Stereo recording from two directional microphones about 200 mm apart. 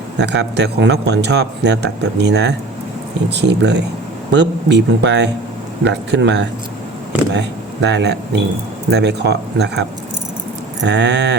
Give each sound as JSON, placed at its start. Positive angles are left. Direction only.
{"t": 0.2, "sound": "speech", "side_deg": -60}